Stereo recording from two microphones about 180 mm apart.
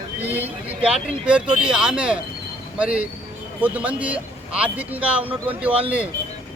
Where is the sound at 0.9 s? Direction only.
5° right (ahead or behind).